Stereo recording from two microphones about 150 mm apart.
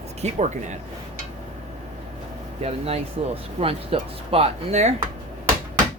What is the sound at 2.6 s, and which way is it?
Speech, 45° right (ahead or behind).